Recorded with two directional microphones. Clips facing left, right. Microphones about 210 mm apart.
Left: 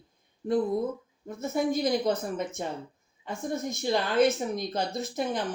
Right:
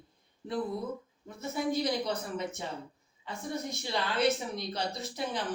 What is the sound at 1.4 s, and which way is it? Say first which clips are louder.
Speech: left 4 dB; 45° left (ahead or behind).